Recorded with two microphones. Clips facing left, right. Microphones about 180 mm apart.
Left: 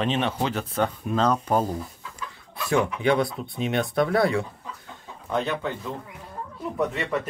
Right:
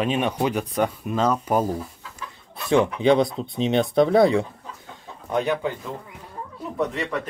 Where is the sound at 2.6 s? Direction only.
25° right (ahead or behind).